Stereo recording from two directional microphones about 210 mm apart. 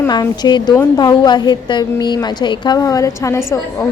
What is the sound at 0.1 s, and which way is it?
A woman's voice, 20° left (ahead or behind).